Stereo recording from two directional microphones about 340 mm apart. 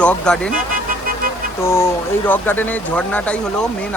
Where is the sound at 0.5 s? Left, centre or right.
Right.